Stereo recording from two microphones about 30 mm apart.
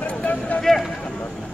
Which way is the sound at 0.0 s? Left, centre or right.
Left.